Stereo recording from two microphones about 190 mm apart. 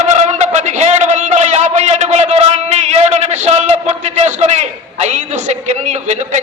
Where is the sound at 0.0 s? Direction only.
35° right (ahead or behind).